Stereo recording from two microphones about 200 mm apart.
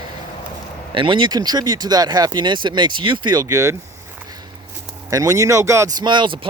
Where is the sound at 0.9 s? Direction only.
25° right (ahead or behind).